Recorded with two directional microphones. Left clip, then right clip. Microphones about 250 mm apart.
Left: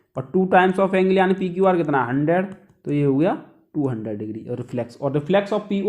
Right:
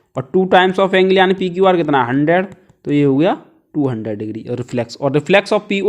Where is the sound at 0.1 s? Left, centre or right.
Right.